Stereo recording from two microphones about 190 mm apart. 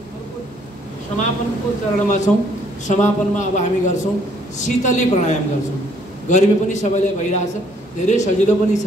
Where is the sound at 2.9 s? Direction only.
40° left (ahead or behind).